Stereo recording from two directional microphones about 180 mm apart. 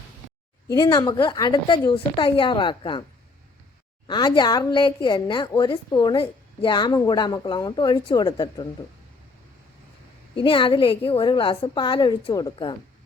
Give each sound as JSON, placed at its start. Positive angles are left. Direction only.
{"t": 0.7, "sound": "a woman's voice", "side_deg": 20}
{"t": 4.0, "sound": "a woman's voice", "side_deg": 25}
{"t": 10.3, "sound": "a woman's voice", "side_deg": 30}